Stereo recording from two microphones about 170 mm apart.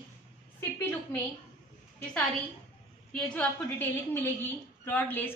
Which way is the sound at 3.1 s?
5° left (ahead or behind).